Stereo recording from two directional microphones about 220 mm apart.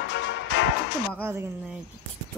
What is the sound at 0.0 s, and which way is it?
Music, 55° left (ahead or behind).